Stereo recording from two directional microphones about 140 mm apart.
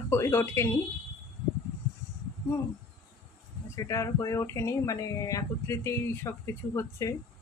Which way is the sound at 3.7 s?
25° left (ahead or behind).